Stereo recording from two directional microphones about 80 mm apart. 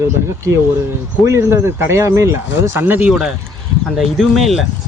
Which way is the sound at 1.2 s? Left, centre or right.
Right.